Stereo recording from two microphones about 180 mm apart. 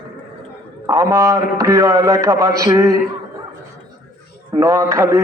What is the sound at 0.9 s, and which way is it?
A man's voice, 15° right (ahead or behind).